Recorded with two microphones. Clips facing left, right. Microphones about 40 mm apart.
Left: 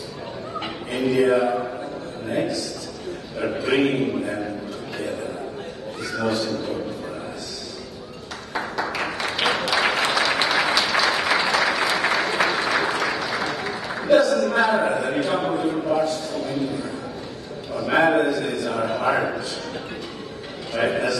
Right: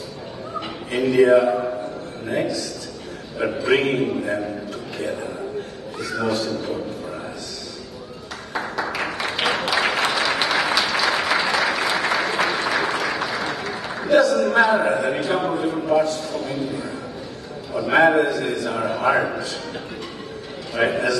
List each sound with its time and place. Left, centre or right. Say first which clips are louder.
0.9 s a man's voice: right 4 dB; centre
3.3 s a man's voice: right 2 dB; centre
4.9 s a sound: right 1 dB; centre
6.1 s a man's voice: right 1 dB; centre
8.5 s applause: right 1 dB; centre
15.2 s a man's voice: right 1 dB; centre
20.7 s a man's voice: right 2 dB; centre